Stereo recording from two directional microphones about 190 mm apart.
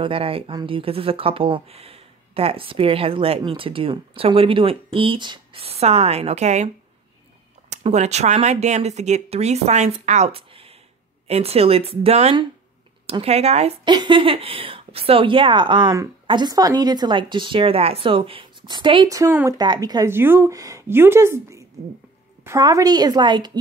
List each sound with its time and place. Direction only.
0.0 s a woman's voice: 30° right (ahead or behind)
7.7 s a woman's voice: 35° right (ahead or behind)